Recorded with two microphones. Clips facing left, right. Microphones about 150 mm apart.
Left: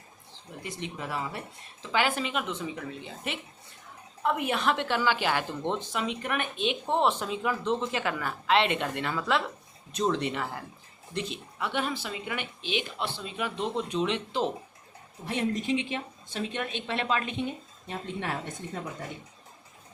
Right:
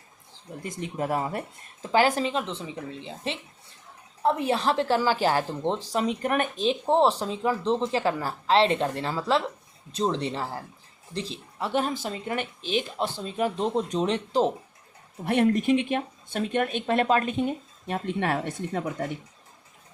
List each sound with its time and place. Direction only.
0.6 s a woman's voice: 45° right (ahead or behind)
15.2 s speech: 60° right (ahead or behind); by 17.5 s 40° right (ahead or behind)
17.8 s speech: 60° right (ahead or behind)